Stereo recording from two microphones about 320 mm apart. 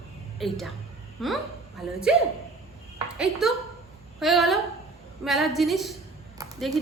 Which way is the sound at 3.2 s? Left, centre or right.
Centre.